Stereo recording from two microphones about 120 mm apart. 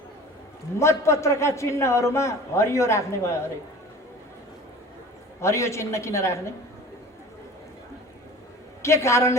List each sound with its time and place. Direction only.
0.8 s a man's voice: 25° left (ahead or behind)
5.4 s a man's voice: 25° left (ahead or behind)
8.8 s a man's voice: 25° left (ahead or behind)